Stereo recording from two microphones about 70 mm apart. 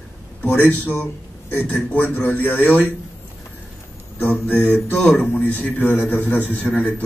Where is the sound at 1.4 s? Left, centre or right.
Left.